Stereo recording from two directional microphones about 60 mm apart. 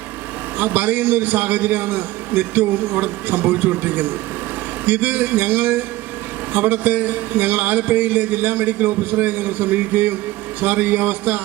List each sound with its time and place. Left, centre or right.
0.6 s a man's voice: right